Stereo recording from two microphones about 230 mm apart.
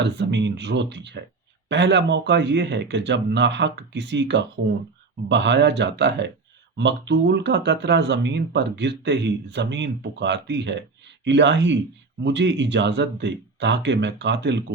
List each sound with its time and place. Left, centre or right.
0.0 s speech: right